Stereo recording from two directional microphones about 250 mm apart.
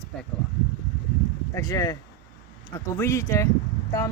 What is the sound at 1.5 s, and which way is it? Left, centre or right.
Speech, centre.